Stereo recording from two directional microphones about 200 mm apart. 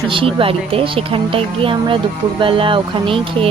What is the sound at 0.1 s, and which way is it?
A woman's voice, 25° right (ahead or behind).